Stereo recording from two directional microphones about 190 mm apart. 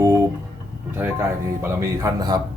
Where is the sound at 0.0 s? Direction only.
15° right (ahead or behind).